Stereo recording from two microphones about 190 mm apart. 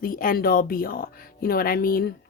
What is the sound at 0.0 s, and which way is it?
Speech, 45° left (ahead or behind).